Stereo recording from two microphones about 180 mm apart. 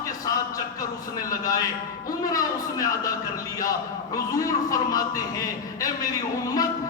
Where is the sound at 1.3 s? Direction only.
20° left (ahead or behind).